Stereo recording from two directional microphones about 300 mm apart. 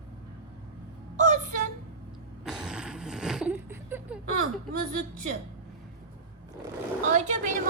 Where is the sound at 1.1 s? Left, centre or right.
Right.